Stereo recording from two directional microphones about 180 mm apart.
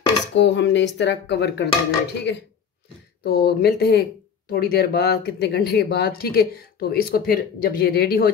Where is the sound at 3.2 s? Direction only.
60° left (ahead or behind).